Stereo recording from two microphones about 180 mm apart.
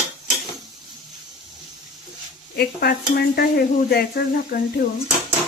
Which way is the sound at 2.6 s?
60° left (ahead or behind).